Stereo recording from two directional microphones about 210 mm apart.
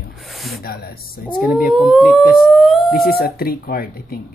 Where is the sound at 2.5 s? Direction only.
Centre (ahead or behind).